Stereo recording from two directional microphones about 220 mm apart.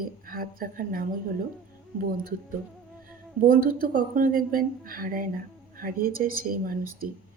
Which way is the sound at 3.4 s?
40° right (ahead or behind).